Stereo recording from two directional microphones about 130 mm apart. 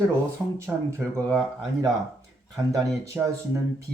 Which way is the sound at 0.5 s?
20° right (ahead or behind).